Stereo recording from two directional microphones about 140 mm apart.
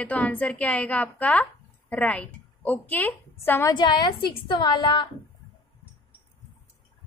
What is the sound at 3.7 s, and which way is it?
A woman's voice, 30° left (ahead or behind).